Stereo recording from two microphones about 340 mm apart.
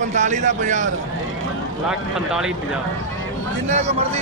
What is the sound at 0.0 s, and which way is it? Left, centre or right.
Speech, right.